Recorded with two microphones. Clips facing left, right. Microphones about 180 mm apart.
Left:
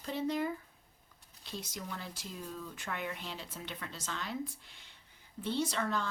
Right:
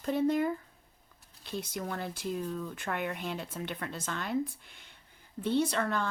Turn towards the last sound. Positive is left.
turn(degrees=-55)  # may be behind; listen again after turning